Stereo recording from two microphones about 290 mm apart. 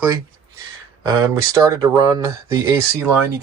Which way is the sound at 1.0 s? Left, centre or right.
Centre.